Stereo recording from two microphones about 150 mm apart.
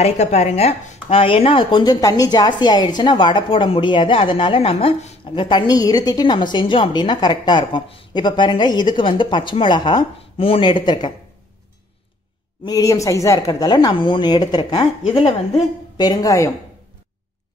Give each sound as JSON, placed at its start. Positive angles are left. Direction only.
{"t": 0.0, "sound": "speech", "side_deg": 45}
{"t": 12.6, "sound": "a woman's voice", "side_deg": 25}
{"t": 15.5, "sound": "a woman's voice", "side_deg": 25}